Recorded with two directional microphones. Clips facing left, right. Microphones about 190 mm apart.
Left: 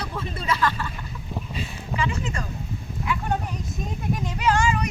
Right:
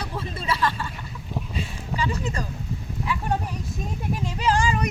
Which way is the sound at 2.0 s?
35° right (ahead or behind).